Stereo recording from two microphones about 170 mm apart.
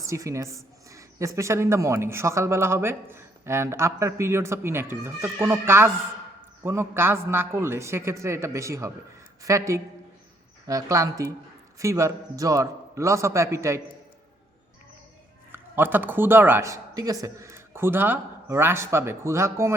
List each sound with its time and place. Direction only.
0.0 s speech: 20° right (ahead or behind)
15.5 s speech: 10° right (ahead or behind)